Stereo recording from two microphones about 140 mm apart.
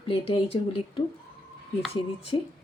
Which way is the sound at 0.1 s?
40° left (ahead or behind).